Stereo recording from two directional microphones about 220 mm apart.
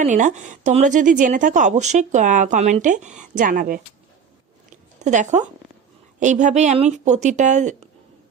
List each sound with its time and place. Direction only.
0.0 s speech: 35° right (ahead or behind)
4.7 s a sound: 35° right (ahead or behind)
6.1 s speech: 35° right (ahead or behind)